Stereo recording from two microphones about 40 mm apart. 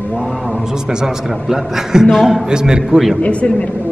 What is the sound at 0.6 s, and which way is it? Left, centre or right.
Speech, centre.